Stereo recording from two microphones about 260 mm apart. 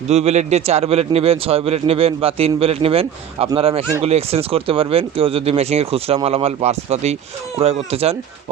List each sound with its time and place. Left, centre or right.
0.1 s a man's voice: right